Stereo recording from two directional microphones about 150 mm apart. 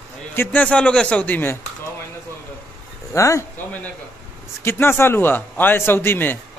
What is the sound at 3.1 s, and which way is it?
Speech, 20° left (ahead or behind).